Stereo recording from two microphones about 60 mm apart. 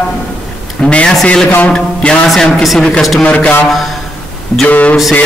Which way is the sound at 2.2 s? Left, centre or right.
Centre.